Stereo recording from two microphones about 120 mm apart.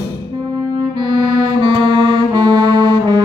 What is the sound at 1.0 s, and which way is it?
Music, 40° right (ahead or behind).